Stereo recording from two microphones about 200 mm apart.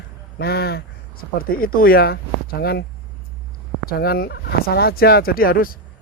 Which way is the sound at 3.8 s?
50° left (ahead or behind).